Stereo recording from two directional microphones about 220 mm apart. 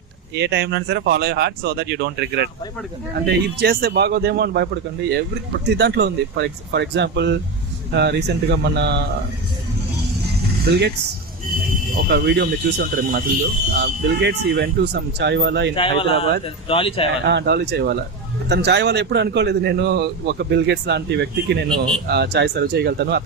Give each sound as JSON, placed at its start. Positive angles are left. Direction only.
{"t": 0.3, "sound": "a man's voice", "side_deg": -50}
{"t": 10.7, "sound": "a man's voice", "side_deg": -50}
{"t": 12.0, "sound": "a man's voice", "side_deg": -50}
{"t": 15.7, "sound": "speech", "side_deg": 25}
{"t": 17.2, "sound": "a man's voice", "side_deg": -50}